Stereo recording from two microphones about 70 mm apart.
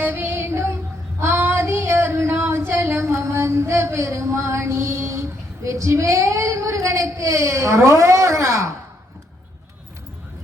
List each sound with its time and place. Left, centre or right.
0.0 s female singing: right
5.6 s speech: right